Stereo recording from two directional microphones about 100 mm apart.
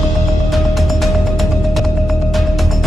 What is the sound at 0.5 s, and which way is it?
Music, centre (ahead or behind).